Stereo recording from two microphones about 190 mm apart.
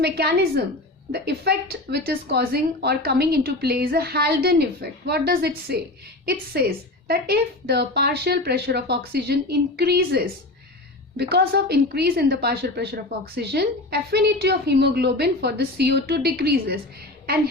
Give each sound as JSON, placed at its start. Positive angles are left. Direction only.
{"t": 0.0, "sound": "a woman's voice", "side_deg": -55}